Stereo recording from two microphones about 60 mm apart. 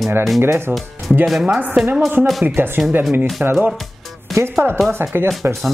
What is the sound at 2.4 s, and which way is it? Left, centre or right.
Speech, right.